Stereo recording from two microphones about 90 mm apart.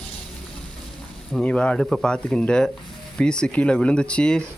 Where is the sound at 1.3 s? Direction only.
10° left (ahead or behind).